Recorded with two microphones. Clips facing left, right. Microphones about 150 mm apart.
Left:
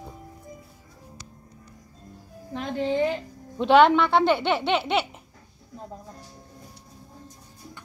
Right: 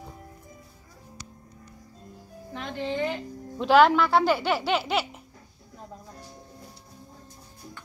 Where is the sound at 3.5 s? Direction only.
Centre (ahead or behind).